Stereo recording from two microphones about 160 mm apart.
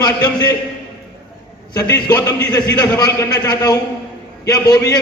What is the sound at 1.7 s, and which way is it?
A man's voice, 25° left (ahead or behind).